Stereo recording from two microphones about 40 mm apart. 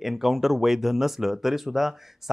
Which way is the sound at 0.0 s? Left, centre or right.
Centre.